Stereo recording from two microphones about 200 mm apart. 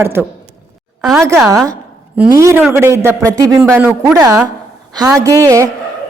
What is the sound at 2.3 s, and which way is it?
Speech, 15° right (ahead or behind).